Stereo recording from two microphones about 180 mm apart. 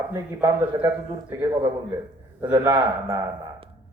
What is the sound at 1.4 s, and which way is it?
Speech, 25° right (ahead or behind).